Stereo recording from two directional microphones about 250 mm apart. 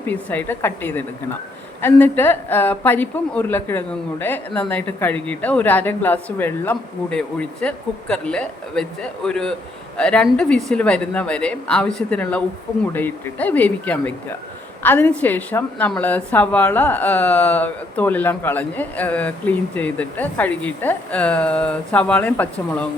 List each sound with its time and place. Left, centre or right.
0.1 s a woman's voice: centre